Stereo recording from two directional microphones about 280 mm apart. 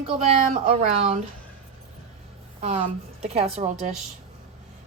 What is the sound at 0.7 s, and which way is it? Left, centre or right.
Speech, right.